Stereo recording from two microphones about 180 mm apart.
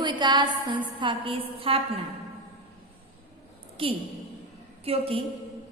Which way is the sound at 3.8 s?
30° right (ahead or behind).